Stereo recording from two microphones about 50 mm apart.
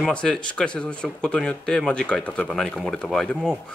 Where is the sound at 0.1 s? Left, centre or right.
Centre.